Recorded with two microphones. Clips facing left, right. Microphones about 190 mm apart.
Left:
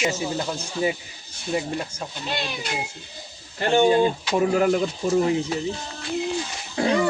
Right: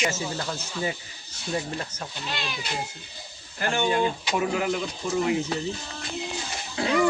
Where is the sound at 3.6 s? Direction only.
30° left (ahead or behind).